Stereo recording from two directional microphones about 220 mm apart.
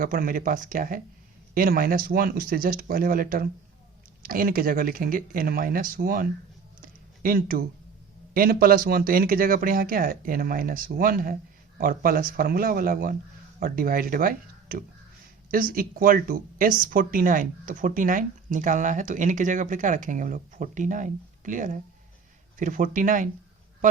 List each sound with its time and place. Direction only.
0.0 s speech: 40° right (ahead or behind)